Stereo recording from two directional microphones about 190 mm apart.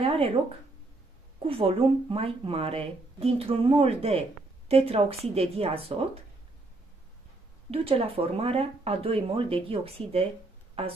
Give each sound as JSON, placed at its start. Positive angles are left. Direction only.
{"t": 0.0, "sound": "a sound", "side_deg": -30}
{"t": 1.5, "sound": "speech", "side_deg": -30}
{"t": 7.7, "sound": "speech", "side_deg": -30}